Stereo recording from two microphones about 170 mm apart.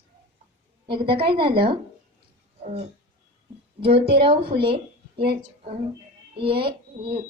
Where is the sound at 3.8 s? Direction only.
35° right (ahead or behind).